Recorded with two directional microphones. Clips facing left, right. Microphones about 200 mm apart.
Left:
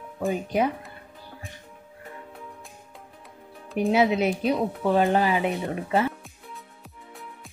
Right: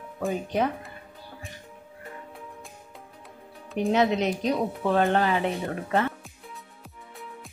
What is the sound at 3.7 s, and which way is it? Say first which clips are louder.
Speech: left 2 dB; 5° left (ahead or behind).